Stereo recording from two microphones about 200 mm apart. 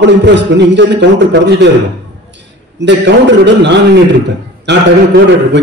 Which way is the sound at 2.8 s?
60° right (ahead or behind).